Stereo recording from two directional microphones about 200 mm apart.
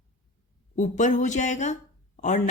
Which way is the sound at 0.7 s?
40° left (ahead or behind).